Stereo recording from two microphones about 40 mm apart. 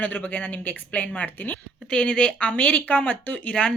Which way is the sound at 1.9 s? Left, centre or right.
Left.